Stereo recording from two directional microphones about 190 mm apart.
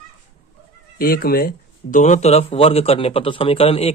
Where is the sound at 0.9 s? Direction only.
50° left (ahead or behind).